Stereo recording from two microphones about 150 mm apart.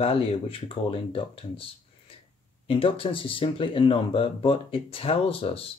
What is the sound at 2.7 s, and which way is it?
Speech, 40° left (ahead or behind).